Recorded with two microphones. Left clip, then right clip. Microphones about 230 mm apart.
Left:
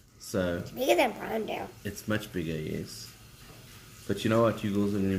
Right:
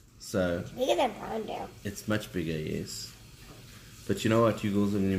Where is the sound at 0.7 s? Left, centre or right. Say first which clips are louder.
Left 3 dB; left.